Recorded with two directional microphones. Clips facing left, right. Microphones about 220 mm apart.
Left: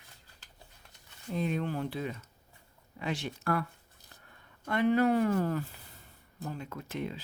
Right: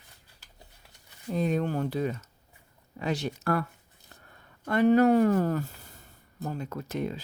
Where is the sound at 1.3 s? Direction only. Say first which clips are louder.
Right 5 dB; 40° right (ahead or behind).